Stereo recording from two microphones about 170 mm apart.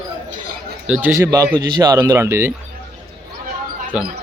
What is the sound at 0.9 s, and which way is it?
Speech, 5° right (ahead or behind).